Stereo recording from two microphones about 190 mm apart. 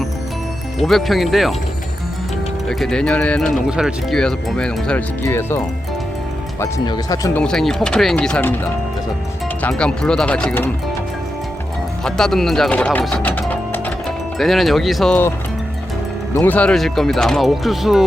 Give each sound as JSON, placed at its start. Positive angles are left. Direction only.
{"t": 0.8, "sound": "speech", "side_deg": 0}
{"t": 2.6, "sound": "speech", "side_deg": 0}
{"t": 7.3, "sound": "speech", "side_deg": 5}
{"t": 9.6, "sound": "speech", "side_deg": 5}
{"t": 12.0, "sound": "speech", "side_deg": 5}
{"t": 16.3, "sound": "speech", "side_deg": 10}